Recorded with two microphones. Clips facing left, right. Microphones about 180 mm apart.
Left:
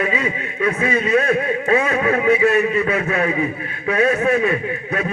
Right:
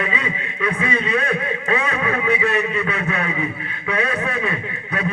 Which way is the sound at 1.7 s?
35° left (ahead or behind).